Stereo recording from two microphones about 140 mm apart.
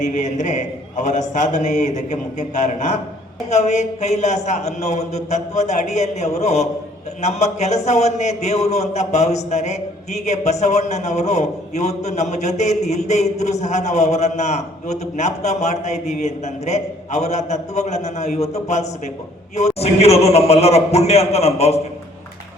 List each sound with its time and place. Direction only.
0.0 s a man's voice: 60° left (ahead or behind)